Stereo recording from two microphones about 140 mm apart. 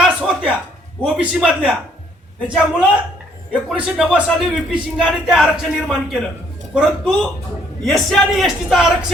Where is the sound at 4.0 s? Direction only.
Centre (ahead or behind).